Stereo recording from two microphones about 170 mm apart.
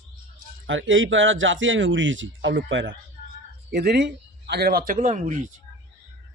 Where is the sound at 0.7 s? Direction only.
90° right.